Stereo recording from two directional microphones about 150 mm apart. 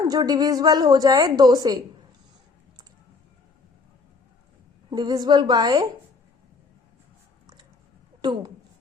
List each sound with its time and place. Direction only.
0.1 s a woman's voice: 25° right (ahead or behind)
4.9 s a woman's voice: 25° right (ahead or behind)
8.2 s a woman's voice: 30° right (ahead or behind)